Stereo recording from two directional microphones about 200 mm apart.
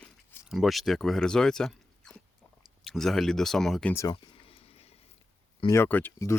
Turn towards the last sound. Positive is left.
turn(degrees=10)  # may be behind; listen again after turning